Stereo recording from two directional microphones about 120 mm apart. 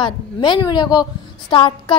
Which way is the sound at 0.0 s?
40° left (ahead or behind).